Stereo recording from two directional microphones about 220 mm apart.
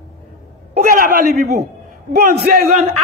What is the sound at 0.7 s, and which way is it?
A man's voice, 40° right (ahead or behind).